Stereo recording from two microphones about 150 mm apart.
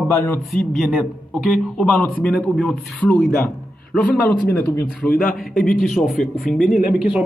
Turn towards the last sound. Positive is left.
turn(degrees=-5)  # may be behind; listen again after turning